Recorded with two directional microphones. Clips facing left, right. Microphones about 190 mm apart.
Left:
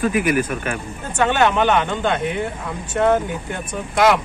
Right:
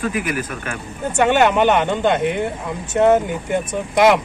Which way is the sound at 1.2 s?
15° right (ahead or behind).